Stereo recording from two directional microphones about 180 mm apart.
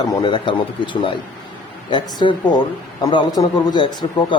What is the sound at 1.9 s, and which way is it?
Speech, 25° left (ahead or behind).